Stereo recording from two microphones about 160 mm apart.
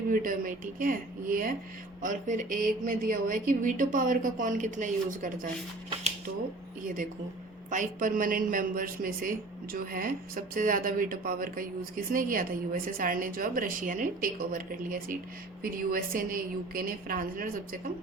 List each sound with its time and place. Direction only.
0.1 s speech: 60° right (ahead or behind)
6.8 s speech: 55° right (ahead or behind)